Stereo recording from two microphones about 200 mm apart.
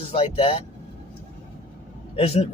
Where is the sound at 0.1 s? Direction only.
30° left (ahead or behind).